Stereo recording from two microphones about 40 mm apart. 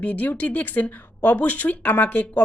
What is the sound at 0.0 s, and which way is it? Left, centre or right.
Speech, left.